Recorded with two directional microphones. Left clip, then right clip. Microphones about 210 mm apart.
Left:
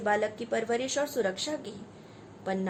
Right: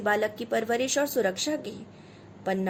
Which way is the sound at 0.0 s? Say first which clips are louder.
Right 2 dB; 25° right (ahead or behind).